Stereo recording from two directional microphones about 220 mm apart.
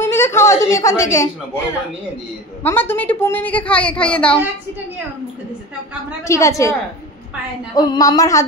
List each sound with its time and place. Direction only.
0.0 s a sound: 10° left (ahead or behind)
2.6 s a woman's voice: 10° left (ahead or behind)
6.2 s a woman's voice: 15° left (ahead or behind)